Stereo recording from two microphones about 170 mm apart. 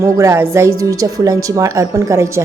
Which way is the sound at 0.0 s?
15° right (ahead or behind).